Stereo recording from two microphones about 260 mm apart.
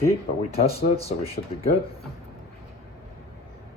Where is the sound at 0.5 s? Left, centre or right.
Left.